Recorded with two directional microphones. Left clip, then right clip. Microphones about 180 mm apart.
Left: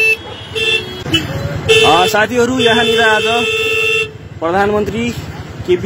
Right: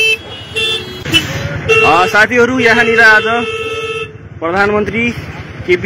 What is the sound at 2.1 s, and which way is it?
A man's voice, 10° left (ahead or behind).